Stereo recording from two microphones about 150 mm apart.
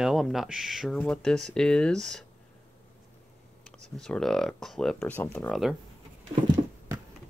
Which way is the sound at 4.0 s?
5° left (ahead or behind).